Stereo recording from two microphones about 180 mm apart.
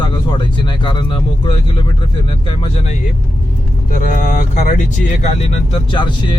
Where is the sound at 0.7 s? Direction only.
25° left (ahead or behind).